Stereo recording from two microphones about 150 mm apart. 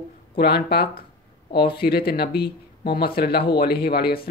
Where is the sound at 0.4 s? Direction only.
90° left.